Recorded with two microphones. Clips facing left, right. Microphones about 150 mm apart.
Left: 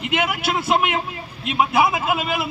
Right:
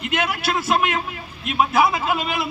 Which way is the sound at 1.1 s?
20° left (ahead or behind).